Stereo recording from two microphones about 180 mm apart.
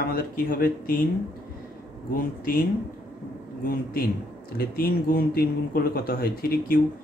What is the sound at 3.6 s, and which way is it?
Speech, 50° left (ahead or behind).